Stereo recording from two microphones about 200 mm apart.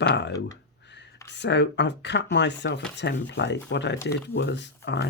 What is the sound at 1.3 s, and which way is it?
Speech, 60° left (ahead or behind).